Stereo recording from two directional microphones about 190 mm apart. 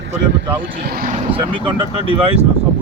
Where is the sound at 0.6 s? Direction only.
60° right (ahead or behind).